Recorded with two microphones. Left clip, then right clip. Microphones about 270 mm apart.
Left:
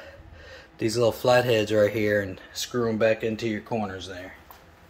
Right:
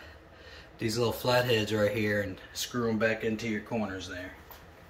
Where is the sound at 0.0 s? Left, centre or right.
Centre.